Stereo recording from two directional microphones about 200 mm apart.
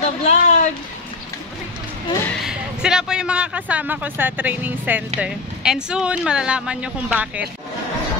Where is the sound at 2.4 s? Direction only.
5° right (ahead or behind).